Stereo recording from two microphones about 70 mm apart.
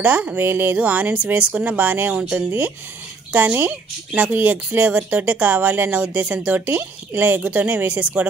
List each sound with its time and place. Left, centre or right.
0.0 s speech: centre
0.4 s speech: right